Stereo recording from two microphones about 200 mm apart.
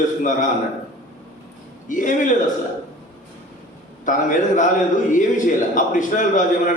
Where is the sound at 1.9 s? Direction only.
40° left (ahead or behind).